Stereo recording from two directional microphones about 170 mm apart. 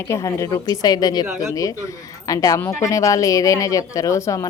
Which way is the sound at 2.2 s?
20° left (ahead or behind).